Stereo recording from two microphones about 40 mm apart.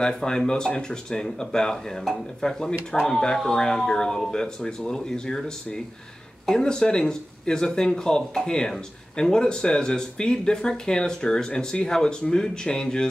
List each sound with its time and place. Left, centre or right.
0.0 s speech: centre
6.5 s speech: centre